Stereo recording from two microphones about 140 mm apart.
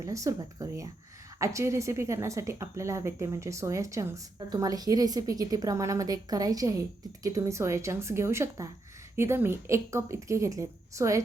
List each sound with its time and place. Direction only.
0.0 s a woman's voice: 25° right (ahead or behind)